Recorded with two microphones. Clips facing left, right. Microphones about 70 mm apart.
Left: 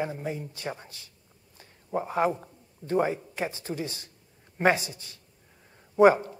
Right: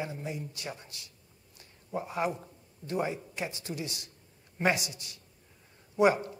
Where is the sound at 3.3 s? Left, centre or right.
Left.